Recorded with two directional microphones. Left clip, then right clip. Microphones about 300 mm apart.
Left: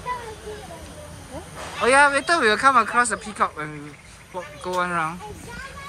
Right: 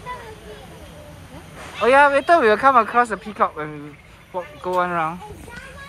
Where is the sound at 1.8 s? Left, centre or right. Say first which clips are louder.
Right 3 dB; centre.